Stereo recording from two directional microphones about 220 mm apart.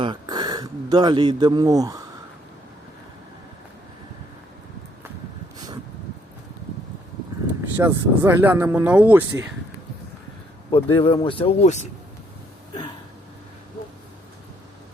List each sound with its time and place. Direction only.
0.0 s a man's voice: 20° right (ahead or behind)
7.6 s speech: 10° right (ahead or behind)
10.7 s speech: 25° left (ahead or behind)